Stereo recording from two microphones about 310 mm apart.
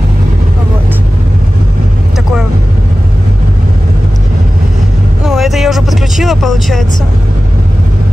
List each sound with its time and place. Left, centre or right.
5.2 s vehicle: centre